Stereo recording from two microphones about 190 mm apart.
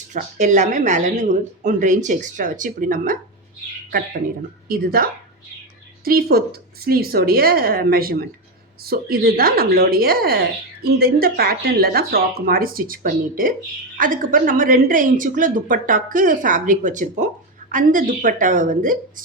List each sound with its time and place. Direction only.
0.1 s speech: 40° right (ahead or behind)
4.7 s speech: 50° right (ahead or behind)
6.1 s speech: 50° right (ahead or behind)